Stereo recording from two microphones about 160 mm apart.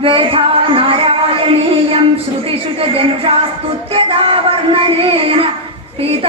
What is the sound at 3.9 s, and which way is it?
Child singing, 35° right (ahead or behind).